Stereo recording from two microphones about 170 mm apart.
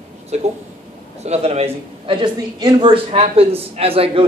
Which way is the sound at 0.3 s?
40° right (ahead or behind).